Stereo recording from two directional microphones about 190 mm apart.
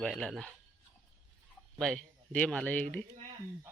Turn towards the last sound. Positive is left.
turn(degrees=10)  # may be behind; listen again after turning